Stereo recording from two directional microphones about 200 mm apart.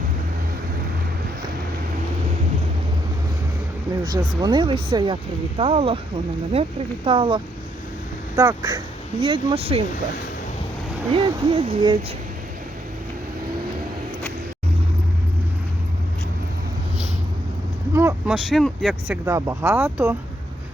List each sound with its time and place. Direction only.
4.2 s speech: 20° right (ahead or behind)
11.1 s speech: 25° right (ahead or behind)
17.9 s speech: 15° right (ahead or behind)
18.4 s speech: centre (ahead or behind)